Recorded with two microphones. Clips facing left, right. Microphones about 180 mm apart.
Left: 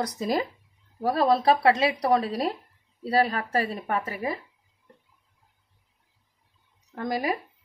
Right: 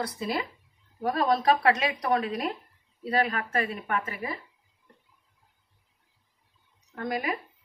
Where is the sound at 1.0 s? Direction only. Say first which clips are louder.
Left 3 dB; 30° left (ahead or behind).